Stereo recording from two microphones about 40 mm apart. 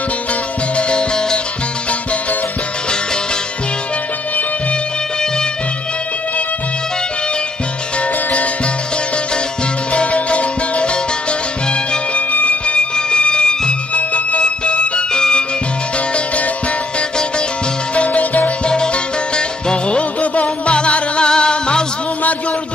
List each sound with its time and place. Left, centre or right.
0.7 s music: left
9.9 s music: left
12.3 s music: left
12.9 s music: left
17.9 s music: left
19.3 s music: left